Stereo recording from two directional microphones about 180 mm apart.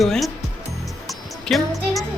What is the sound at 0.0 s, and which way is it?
Music, centre (ahead or behind).